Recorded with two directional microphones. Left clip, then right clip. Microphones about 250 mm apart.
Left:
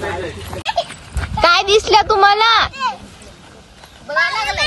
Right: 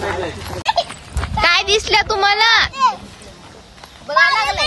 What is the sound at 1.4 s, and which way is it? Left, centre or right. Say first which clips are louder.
A child's voice: left 3 dB; centre.